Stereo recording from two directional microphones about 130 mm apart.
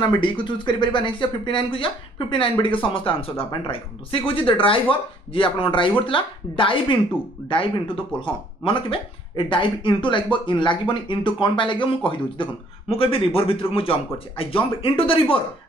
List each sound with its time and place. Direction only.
0.0 s speech: 35° left (ahead or behind)